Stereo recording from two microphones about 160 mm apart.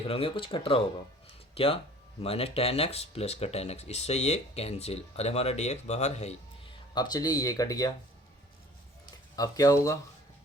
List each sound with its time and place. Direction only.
0.1 s speech: 35° left (ahead or behind)
6.9 s speech: 25° left (ahead or behind)
9.3 s speech: 25° left (ahead or behind)